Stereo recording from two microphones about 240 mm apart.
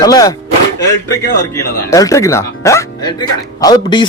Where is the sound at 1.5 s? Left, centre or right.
Centre.